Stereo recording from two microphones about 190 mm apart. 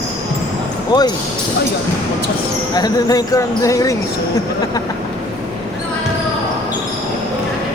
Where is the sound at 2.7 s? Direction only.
20° left (ahead or behind).